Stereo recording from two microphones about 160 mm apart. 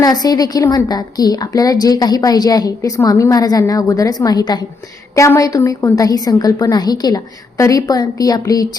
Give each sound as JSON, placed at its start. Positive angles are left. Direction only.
{"t": 0.0, "sound": "a woman's voice", "side_deg": 25}